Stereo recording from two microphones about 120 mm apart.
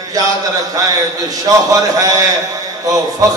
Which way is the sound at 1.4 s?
30° right (ahead or behind).